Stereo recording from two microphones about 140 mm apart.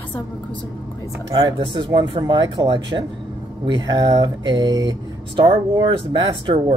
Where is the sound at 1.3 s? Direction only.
30° right (ahead or behind).